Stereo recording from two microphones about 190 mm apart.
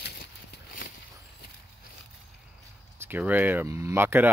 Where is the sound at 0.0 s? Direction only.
55° left (ahead or behind).